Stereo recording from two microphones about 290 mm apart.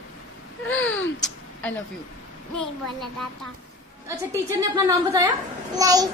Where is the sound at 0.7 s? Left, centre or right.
Left.